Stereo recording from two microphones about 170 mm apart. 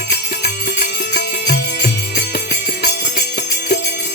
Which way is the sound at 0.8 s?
60° left (ahead or behind).